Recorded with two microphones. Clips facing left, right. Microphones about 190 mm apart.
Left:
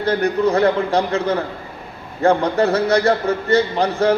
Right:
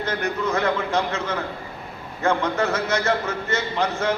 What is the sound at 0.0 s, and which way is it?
A man's voice, 35° left (ahead or behind).